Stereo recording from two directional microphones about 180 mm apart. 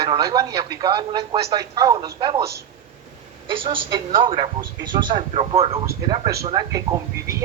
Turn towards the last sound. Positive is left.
turn(degrees=-20)  # may be behind; listen again after turning